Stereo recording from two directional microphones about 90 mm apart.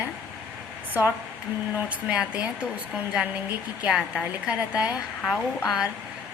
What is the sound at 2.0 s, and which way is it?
Speech, 10° right (ahead or behind).